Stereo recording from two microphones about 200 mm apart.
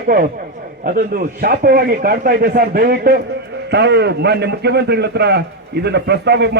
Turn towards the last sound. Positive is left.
turn(degrees=-55)  # may be behind; listen again after turning